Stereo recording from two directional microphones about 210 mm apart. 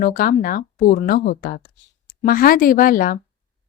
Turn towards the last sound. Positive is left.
turn(degrees=40)  # may be behind; listen again after turning